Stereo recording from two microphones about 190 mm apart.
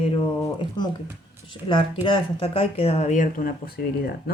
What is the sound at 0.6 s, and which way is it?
Speech, 25° left (ahead or behind).